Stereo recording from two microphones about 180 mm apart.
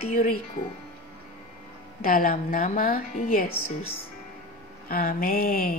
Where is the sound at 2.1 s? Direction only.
50° left (ahead or behind).